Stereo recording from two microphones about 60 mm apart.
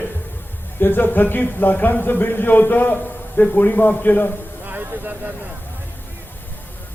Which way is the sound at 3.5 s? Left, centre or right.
Left.